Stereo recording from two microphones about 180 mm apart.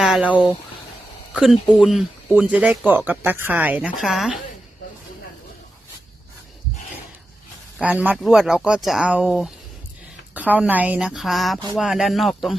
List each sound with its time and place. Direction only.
0.0 s speech: 5° right (ahead or behind)
7.8 s speech: 10° right (ahead or behind)